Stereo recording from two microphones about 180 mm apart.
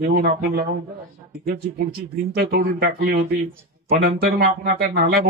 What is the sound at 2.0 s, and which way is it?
Speech, 60° right (ahead or behind).